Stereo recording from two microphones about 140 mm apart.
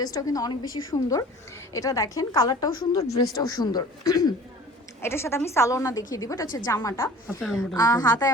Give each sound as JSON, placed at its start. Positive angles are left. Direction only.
{"t": 0.0, "sound": "a woman's voice", "side_deg": 25}